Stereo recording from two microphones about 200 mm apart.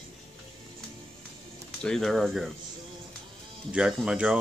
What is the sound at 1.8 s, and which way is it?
Speech, 5° left (ahead or behind).